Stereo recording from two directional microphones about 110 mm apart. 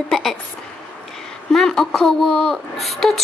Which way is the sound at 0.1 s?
5° left (ahead or behind).